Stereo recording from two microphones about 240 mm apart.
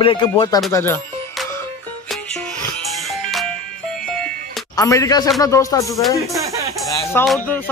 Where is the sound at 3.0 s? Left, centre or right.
Centre.